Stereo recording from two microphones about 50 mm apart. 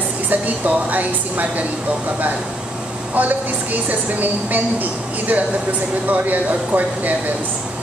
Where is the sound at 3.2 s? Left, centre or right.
Right.